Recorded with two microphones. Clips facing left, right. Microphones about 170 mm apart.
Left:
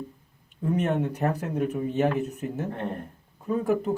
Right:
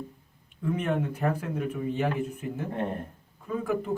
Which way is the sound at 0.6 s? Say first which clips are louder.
Left 3 dB; 40° left (ahead or behind).